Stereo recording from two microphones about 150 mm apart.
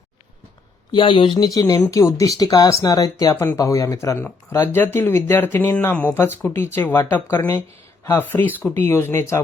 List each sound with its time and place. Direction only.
0.9 s speech: 35° left (ahead or behind); by 9.4 s 15° left (ahead or behind)